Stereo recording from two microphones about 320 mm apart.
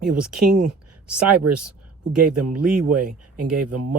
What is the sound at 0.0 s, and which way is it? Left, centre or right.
Speech, right.